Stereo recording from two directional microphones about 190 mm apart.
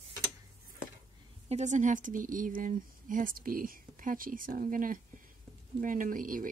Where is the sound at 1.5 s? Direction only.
40° right (ahead or behind).